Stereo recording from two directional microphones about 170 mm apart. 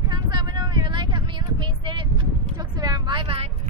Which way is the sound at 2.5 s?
25° right (ahead or behind).